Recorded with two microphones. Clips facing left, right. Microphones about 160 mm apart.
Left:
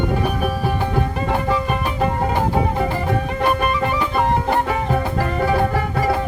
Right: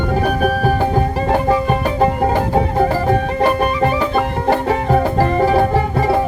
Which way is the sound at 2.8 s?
35° right (ahead or behind).